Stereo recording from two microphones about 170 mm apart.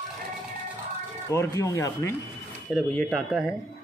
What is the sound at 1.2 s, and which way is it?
Speech, 20° left (ahead or behind).